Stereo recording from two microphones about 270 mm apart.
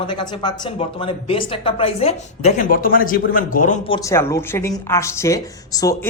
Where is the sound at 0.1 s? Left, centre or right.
Centre.